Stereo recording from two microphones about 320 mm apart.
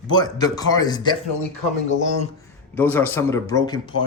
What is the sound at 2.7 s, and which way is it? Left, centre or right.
Speech, centre.